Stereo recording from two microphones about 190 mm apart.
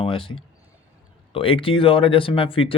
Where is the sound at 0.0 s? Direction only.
30° left (ahead or behind).